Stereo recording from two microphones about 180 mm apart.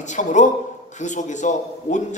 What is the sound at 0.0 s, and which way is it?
A man's voice, 45° left (ahead or behind).